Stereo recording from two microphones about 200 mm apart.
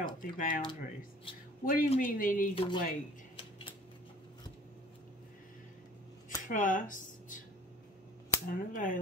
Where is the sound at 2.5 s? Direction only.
25° left (ahead or behind).